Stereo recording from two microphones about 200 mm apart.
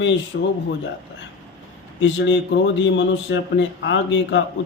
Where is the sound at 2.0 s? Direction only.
65° left (ahead or behind).